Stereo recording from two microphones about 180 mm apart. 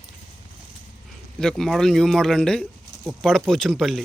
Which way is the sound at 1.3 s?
5° left (ahead or behind).